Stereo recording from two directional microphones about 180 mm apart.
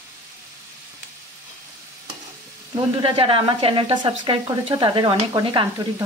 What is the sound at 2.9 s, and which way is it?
Speech, 30° right (ahead or behind).